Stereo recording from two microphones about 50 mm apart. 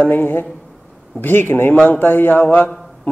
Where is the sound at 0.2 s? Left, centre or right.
Left.